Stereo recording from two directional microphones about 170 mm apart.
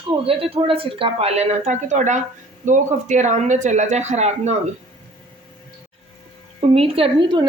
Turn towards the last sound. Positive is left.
turn(degrees=-30)  # may be behind; listen again after turning